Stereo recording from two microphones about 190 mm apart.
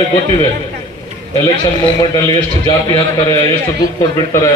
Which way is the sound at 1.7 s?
25° left (ahead or behind).